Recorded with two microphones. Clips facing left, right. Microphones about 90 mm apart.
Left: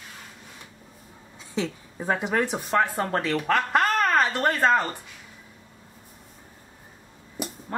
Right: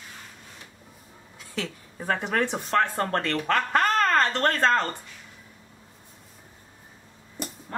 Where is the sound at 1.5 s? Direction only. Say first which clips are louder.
Left 4 dB; 20° left (ahead or behind).